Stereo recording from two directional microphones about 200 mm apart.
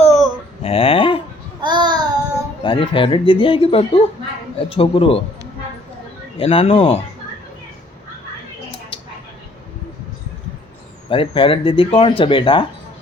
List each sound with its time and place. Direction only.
0.0 s a sound: centre (ahead or behind)
0.6 s a sound: 30° left (ahead or behind)
1.6 s babbling: 20° right (ahead or behind)
2.6 s speech: 25° left (ahead or behind)
6.3 s speech: 30° left (ahead or behind)
11.1 s speech: 25° left (ahead or behind)